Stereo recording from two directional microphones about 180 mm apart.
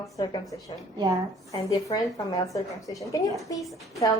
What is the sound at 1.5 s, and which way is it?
A woman's voice, 15° left (ahead or behind).